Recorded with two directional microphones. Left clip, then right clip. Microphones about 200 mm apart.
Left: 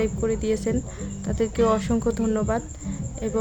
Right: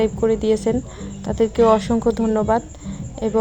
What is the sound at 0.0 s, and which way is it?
Speech, 10° right (ahead or behind).